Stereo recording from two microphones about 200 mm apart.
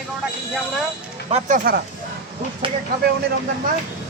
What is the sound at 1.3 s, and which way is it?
Speech, 45° right (ahead or behind).